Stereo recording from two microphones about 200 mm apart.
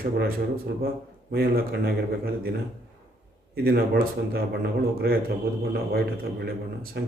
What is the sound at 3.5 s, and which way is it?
Speech, 50° right (ahead or behind).